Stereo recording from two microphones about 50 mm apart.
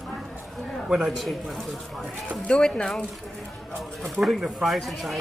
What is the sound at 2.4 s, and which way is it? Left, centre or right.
Speech, centre.